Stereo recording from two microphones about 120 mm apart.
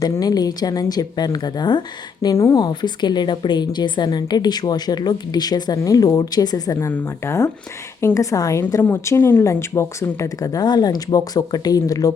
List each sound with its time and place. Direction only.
0.0 s a woman's voice: 30° left (ahead or behind)